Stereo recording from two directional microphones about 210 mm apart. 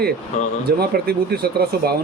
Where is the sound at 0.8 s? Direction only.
50° right (ahead or behind).